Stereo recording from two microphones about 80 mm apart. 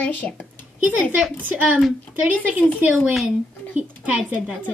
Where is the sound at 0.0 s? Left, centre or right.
Centre.